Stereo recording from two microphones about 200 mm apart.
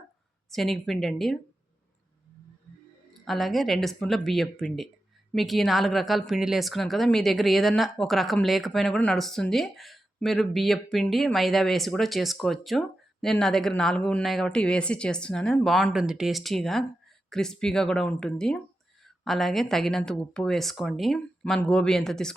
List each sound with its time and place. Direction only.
0.5 s a woman's voice: centre (ahead or behind)
3.2 s a woman's voice: centre (ahead or behind)